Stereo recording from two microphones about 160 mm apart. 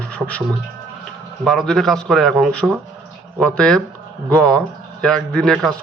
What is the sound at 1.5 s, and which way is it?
A man's voice, 5° left (ahead or behind).